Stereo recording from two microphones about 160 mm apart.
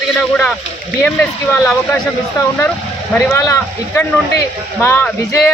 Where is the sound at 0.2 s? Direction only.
5° left (ahead or behind).